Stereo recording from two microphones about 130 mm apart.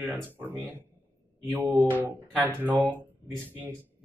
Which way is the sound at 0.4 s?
15° right (ahead or behind).